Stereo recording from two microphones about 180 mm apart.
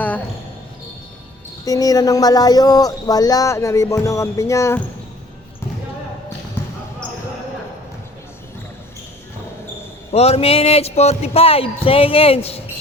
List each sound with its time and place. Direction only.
1.6 s speech: 20° left (ahead or behind)
10.1 s speech: 35° left (ahead or behind)